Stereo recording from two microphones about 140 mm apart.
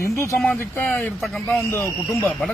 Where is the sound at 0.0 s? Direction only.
20° left (ahead or behind); by 1.6 s centre (ahead or behind).